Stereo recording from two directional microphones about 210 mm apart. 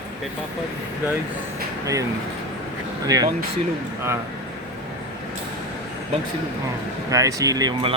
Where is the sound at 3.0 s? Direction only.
15° right (ahead or behind).